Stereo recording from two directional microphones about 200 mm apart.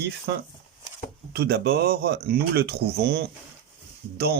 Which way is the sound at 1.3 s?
50° right (ahead or behind).